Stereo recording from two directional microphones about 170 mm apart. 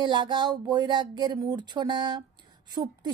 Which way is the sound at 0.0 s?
25° right (ahead or behind).